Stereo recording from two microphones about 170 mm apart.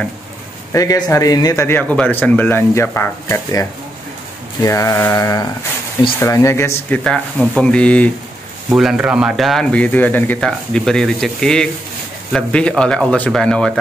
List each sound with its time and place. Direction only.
0.7 s speech: 20° left (ahead or behind)
4.6 s a sound: 20° left (ahead or behind)
6.1 s speech: 15° left (ahead or behind)
7.0 s speech: 5° left (ahead or behind)
8.7 s speech: 5° right (ahead or behind)